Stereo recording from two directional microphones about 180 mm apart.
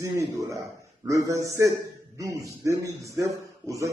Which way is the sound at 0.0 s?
15° right (ahead or behind).